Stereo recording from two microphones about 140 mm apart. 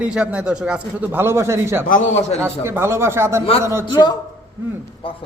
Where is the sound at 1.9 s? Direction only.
55° left (ahead or behind).